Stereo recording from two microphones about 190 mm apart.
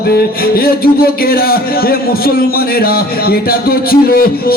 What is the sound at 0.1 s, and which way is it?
A man's voice, 55° left (ahead or behind).